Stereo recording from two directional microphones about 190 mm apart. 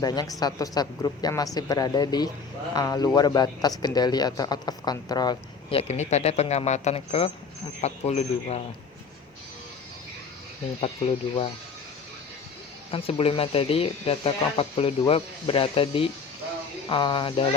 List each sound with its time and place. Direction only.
0.0 s a man's voice: 20° left (ahead or behind)
10.8 s a man's voice: 30° left (ahead or behind)
12.9 s a man's voice: 30° left (ahead or behind)